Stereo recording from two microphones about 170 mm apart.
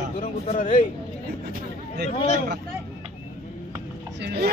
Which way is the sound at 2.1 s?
35° left (ahead or behind).